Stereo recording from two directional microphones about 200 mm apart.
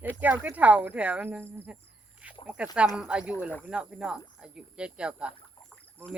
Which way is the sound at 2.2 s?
5° right (ahead or behind).